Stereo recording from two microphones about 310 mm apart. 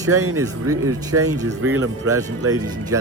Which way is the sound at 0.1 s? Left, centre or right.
Right.